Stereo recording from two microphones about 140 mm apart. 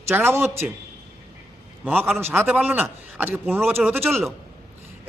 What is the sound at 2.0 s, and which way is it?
Speech, centre (ahead or behind).